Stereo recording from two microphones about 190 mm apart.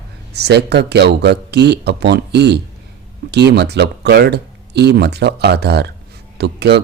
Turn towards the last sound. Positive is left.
turn(degrees=-60)  # may be behind; listen again after turning